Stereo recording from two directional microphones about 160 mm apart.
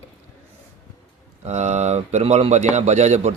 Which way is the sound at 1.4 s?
45° right (ahead or behind).